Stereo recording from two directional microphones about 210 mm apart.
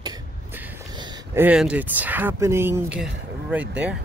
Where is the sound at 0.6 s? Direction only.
10° right (ahead or behind).